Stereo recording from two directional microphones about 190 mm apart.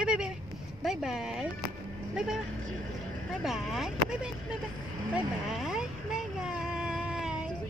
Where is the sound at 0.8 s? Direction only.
Centre (ahead or behind).